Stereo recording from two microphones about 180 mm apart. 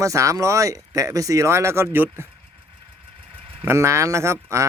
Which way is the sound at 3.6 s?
15° right (ahead or behind).